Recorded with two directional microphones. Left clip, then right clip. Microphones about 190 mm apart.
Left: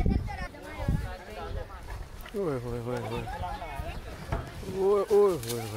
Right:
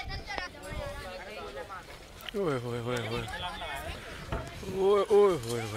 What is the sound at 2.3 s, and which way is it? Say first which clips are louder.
Speech: even; 5° right (ahead or behind).